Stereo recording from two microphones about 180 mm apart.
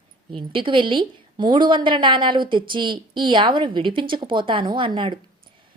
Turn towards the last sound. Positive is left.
turn(degrees=-25)  # may be behind; listen again after turning